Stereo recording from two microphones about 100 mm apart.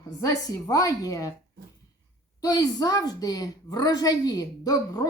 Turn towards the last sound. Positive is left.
turn(degrees=35)  # may be behind; listen again after turning